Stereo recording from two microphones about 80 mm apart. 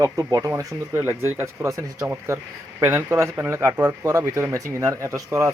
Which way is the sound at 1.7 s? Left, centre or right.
Right.